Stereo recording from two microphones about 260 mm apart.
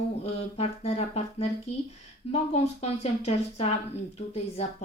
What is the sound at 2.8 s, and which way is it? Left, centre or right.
Speech, left.